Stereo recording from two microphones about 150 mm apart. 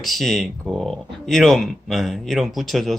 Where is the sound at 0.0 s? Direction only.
Centre (ahead or behind).